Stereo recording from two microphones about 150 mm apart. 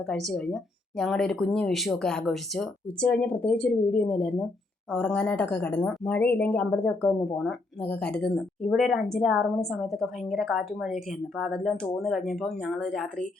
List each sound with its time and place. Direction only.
0.0 s speech: centre (ahead or behind)